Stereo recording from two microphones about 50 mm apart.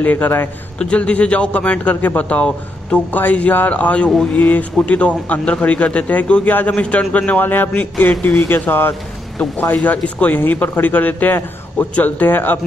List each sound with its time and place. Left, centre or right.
0.0 s a man's voice: left
0.7 s speech: left
2.0 s a man's voice: left
2.2 s a man's voice: left
3.1 s a man's voice: left
4.4 s a man's voice: left
4.7 s speech: left
7.4 s speech: left
7.7 s speech: left
8.5 s speech: left
9.8 s a man's voice: left